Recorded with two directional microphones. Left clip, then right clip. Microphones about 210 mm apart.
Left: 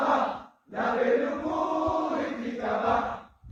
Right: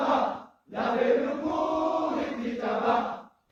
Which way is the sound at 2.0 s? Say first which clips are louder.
Even; 50° right (ahead or behind).